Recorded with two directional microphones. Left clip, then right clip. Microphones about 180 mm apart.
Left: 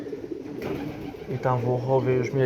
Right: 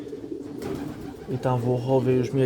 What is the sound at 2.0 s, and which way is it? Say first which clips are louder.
Speech: right 1 dB; 35° right (ahead or behind).